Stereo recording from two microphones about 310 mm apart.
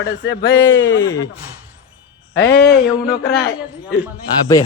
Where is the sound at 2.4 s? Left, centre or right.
Left.